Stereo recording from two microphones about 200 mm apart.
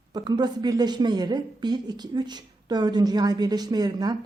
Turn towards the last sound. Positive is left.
turn(degrees=-20)  # may be behind; listen again after turning